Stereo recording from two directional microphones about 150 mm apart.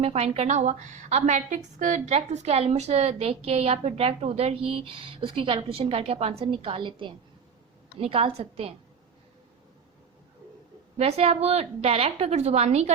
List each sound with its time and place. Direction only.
0.0 s a woman's voice: 45° right (ahead or behind)
10.9 s a woman's voice: 45° right (ahead or behind)